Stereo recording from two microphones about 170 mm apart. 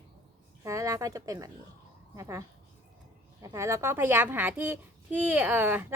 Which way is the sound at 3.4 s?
15° right (ahead or behind).